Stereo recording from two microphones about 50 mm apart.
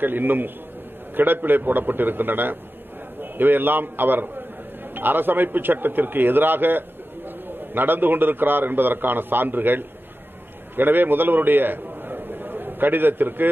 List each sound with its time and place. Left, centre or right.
0.0 s a man's voice: right